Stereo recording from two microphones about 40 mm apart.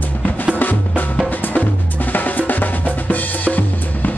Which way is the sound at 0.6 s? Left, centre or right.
Left.